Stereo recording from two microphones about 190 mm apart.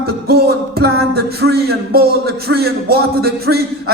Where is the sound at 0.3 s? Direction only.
55° right (ahead or behind).